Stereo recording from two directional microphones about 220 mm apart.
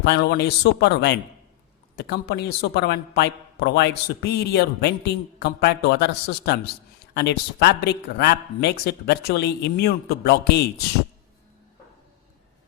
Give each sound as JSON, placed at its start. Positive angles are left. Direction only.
{"t": 0.0, "sound": "a man's voice", "side_deg": 50}